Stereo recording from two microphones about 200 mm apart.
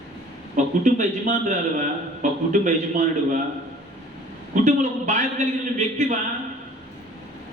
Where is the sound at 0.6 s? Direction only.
35° right (ahead or behind).